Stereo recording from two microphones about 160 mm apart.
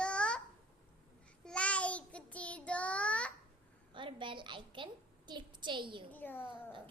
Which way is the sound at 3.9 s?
30° right (ahead or behind).